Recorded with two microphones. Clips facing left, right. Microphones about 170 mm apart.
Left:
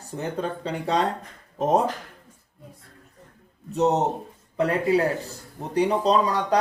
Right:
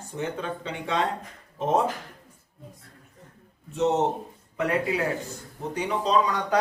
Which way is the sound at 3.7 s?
40° left (ahead or behind).